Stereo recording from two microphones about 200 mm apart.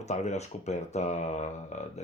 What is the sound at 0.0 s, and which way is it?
Speech, 35° left (ahead or behind).